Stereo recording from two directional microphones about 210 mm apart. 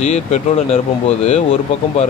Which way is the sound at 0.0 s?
30° left (ahead or behind).